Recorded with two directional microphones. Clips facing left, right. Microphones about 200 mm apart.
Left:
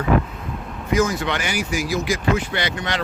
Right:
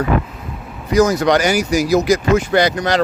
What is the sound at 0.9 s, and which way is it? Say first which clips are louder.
Speech: right 7 dB; 40° right (ahead or behind).